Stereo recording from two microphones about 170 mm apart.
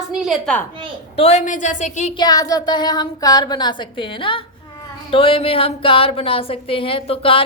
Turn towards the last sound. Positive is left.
turn(degrees=35)  # may be behind; listen again after turning